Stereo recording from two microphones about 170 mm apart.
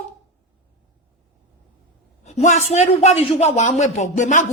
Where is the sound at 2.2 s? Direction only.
40° left (ahead or behind).